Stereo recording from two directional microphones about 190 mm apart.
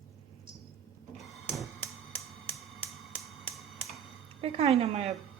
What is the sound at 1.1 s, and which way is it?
Printer, centre (ahead or behind).